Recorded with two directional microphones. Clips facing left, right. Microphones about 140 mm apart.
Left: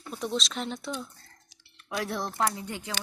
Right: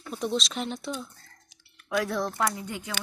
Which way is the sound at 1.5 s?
30° left (ahead or behind).